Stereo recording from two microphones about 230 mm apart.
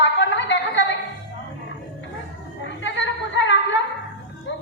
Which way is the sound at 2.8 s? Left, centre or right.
Left.